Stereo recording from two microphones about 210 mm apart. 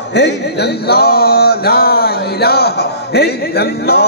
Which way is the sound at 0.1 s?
55° left (ahead or behind).